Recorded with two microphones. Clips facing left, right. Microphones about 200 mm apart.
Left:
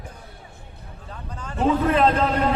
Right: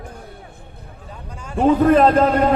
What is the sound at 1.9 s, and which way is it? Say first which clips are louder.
Speech: right 6 dB; 45° right (ahead or behind).